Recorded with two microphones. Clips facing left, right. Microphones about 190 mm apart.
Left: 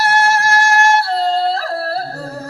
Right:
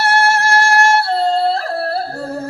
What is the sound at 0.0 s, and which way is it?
Yodeling, 30° right (ahead or behind).